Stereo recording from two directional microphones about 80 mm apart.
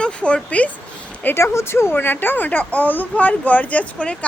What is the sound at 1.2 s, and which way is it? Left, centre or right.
Speech, left.